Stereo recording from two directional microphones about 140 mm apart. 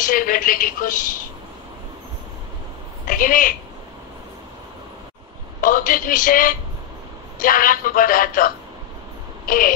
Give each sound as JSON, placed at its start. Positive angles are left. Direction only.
{"t": 0.0, "sound": "a woman's voice", "side_deg": 80}
{"t": 3.1, "sound": "a woman's voice", "side_deg": 80}
{"t": 5.6, "sound": "a man's voice", "side_deg": 70}